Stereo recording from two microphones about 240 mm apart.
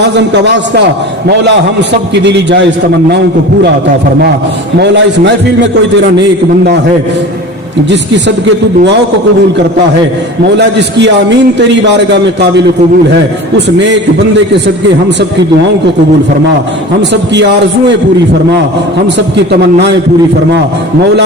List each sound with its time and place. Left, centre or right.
0.0 s a man's voice: right
4.8 s a man's voice: right
10.6 s a man's voice: right
13.7 s a man's voice: right
17.0 s a man's voice: right
19.0 s a man's voice: right